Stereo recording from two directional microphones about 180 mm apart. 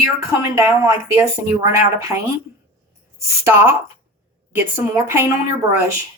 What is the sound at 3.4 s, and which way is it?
A woman's voice, 15° right (ahead or behind).